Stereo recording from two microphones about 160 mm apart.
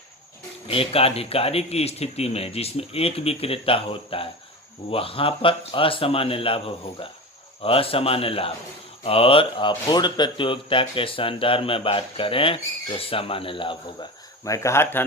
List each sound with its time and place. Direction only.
0.7 s speech: 35° left (ahead or behind)
7.6 s speech: 35° left (ahead or behind); by 15.0 s 15° left (ahead or behind)